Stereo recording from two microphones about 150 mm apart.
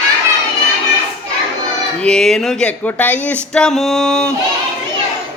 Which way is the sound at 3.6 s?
5° left (ahead or behind).